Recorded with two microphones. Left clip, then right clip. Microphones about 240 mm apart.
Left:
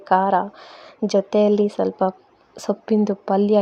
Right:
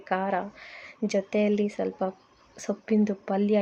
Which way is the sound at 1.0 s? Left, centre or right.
Centre.